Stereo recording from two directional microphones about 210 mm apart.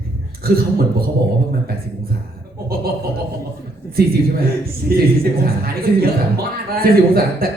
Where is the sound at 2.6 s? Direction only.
45° right (ahead or behind).